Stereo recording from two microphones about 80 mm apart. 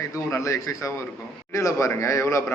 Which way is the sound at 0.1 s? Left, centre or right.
Left.